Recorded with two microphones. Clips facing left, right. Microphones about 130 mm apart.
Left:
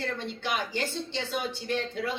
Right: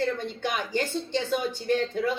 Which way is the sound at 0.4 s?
45° right (ahead or behind).